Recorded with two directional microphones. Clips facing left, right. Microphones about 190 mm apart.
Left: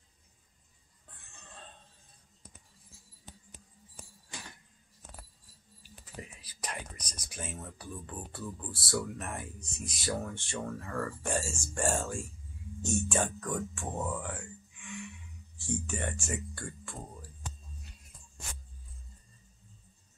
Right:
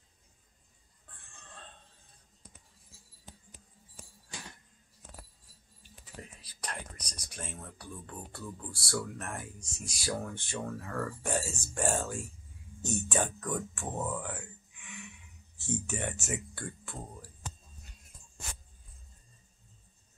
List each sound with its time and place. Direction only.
6.2 s whispering: 10° left (ahead or behind)
6.6 s speech: 5° left (ahead or behind)
15.5 s music: 20° right (ahead or behind)
15.9 s speech: 5° right (ahead or behind)